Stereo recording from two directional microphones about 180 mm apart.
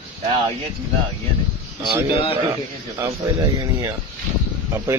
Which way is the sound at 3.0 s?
20° right (ahead or behind).